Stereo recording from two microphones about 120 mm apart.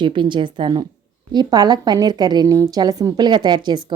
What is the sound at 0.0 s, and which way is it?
A woman's voice, 45° right (ahead or behind).